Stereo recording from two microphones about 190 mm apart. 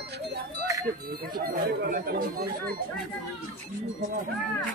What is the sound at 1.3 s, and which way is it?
Speech, 50° right (ahead or behind).